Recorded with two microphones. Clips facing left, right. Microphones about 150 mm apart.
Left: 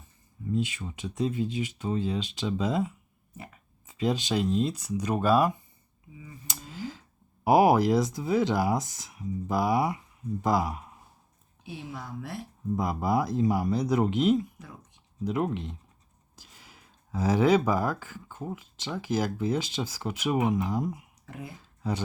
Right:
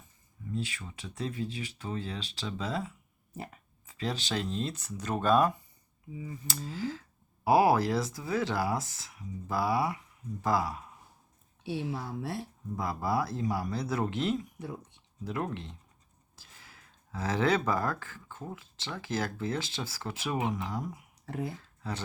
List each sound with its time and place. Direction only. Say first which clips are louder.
0.5 s speech: left 7 dB; 20° left (ahead or behind)
11.6 s speech: right 5 dB; 30° right (ahead or behind)
12.7 s speech: left 4 dB; 20° left (ahead or behind)
14.6 s a sound: right 7 dB; 30° right (ahead or behind)
15.2 s speech: left 6 dB; 15° left (ahead or behind)
21.2 s speech: right 6 dB; 35° right (ahead or behind)